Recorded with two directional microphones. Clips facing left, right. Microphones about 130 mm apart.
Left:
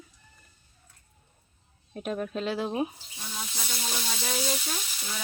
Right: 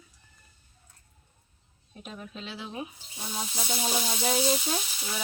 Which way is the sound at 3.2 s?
25° right (ahead or behind).